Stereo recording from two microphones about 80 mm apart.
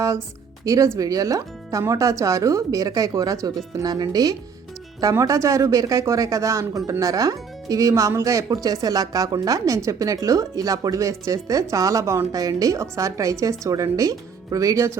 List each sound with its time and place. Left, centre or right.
0.6 s speech: right
5.1 s speech: right